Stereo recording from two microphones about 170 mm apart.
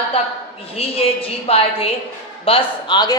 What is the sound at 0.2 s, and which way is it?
A woman's voice, 35° left (ahead or behind).